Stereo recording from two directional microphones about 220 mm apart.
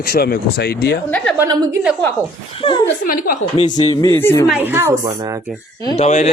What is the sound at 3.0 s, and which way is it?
Speech, 40° left (ahead or behind).